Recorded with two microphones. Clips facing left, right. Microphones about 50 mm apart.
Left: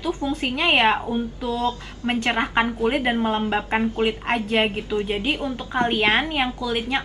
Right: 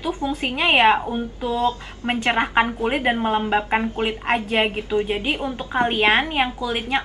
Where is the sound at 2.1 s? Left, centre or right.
Centre.